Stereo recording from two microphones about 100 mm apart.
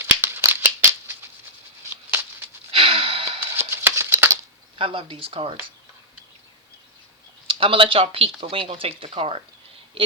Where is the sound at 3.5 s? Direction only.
25° right (ahead or behind).